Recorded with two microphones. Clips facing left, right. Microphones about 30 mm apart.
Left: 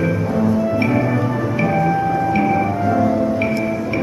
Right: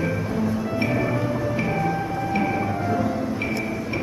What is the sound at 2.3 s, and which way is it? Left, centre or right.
Music, centre.